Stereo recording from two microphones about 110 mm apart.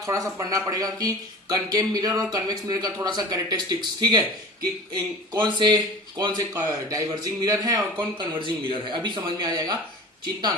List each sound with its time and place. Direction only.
0.0 s speech: 30° right (ahead or behind)